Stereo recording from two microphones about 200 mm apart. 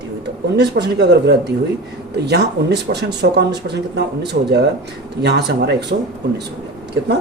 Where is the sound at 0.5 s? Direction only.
55° right (ahead or behind).